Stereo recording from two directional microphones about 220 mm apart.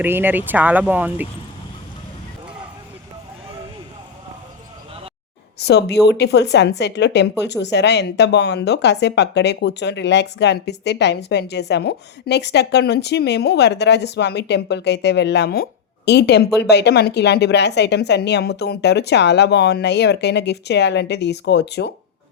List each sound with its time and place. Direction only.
0.0 s speech: 10° right (ahead or behind)
5.5 s a woman's voice: 50° left (ahead or behind)